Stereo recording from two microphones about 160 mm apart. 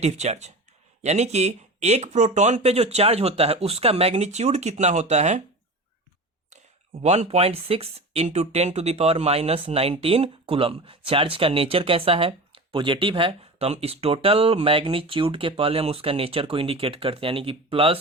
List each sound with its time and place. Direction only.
0.0 s speech: 45° right (ahead or behind)
6.5 s speech: 40° right (ahead or behind)